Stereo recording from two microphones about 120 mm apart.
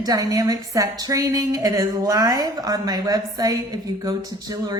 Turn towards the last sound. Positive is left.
turn(degrees=-30)  # may be behind; listen again after turning